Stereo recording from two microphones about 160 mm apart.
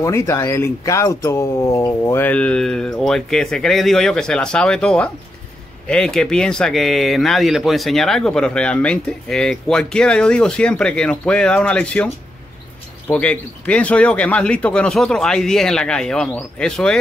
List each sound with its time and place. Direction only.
0.0 s speech: 15° left (ahead or behind)
13.1 s speech: 5° left (ahead or behind)